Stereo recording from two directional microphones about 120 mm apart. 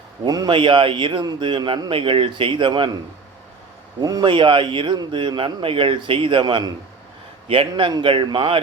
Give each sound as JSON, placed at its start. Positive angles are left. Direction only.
{"t": 0.3, "sound": "speech", "side_deg": -35}
{"t": 0.5, "sound": "speech", "side_deg": -45}
{"t": 4.0, "sound": "speech", "side_deg": -35}